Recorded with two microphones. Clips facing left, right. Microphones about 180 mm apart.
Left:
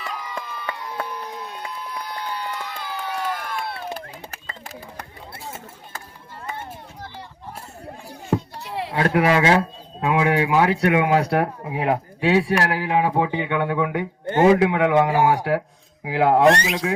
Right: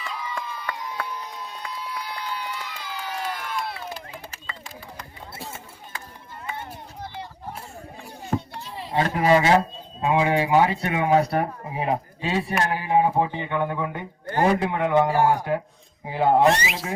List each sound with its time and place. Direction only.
0.0 s run: 55° left (ahead or behind)
1.1 s a sound: 60° left (ahead or behind)
2.5 s run: 60° left (ahead or behind)
4.7 s a sound: 65° left (ahead or behind)
8.6 s speech: 70° left (ahead or behind)
14.3 s a sound: 25° left (ahead or behind)
14.6 s a man's voice: 80° left
15.5 s speech: 90° left
16.4 s speech: centre (ahead or behind)